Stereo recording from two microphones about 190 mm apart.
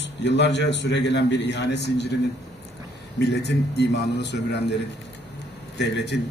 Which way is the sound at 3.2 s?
60° left (ahead or behind).